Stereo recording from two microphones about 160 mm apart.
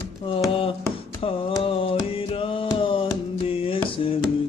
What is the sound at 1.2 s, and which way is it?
Music, 35° left (ahead or behind).